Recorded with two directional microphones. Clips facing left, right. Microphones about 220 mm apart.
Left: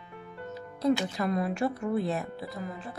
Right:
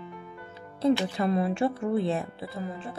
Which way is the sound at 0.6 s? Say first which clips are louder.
Right 2 dB; 30° right (ahead or behind).